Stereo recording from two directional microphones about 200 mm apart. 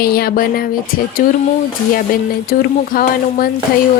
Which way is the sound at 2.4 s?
50° left (ahead or behind).